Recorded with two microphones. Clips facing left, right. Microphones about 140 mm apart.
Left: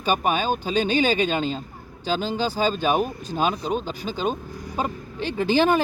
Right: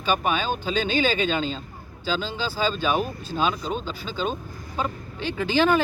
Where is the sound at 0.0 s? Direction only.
45° left (ahead or behind).